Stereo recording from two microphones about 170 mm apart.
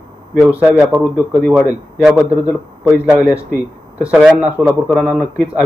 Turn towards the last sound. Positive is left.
turn(degrees=-10)  # may be behind; listen again after turning